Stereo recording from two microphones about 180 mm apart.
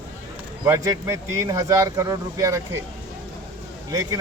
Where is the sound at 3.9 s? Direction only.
20° right (ahead or behind).